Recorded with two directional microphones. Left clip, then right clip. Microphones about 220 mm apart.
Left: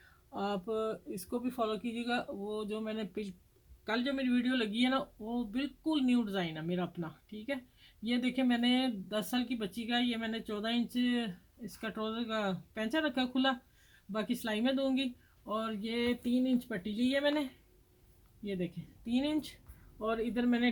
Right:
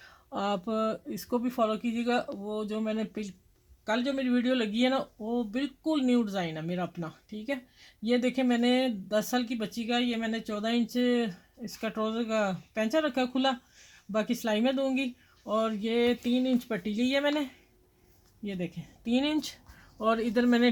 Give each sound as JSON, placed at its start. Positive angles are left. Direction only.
{"t": 0.3, "sound": "speech", "side_deg": -50}